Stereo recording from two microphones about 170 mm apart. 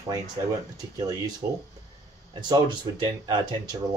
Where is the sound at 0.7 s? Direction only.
25° right (ahead or behind).